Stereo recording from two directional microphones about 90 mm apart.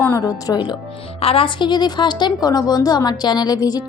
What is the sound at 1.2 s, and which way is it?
A woman's voice, 90° left.